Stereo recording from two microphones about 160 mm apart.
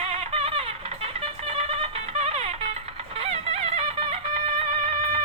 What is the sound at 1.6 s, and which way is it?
Music, 40° right (ahead or behind).